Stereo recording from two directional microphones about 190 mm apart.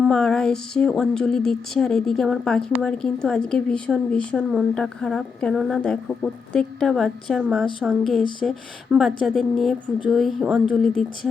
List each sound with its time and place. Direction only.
0.0 s speech: centre (ahead or behind)